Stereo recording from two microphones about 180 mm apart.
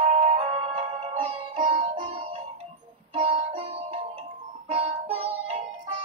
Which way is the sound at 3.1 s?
35° right (ahead or behind).